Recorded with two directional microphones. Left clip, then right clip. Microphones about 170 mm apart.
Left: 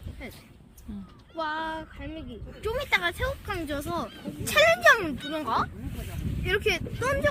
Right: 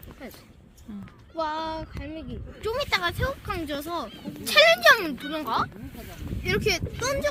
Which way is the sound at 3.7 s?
10° right (ahead or behind).